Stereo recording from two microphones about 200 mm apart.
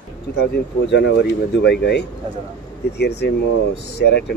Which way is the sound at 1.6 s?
55° left (ahead or behind).